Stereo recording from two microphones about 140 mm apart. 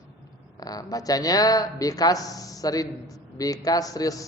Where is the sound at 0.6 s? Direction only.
25° left (ahead or behind).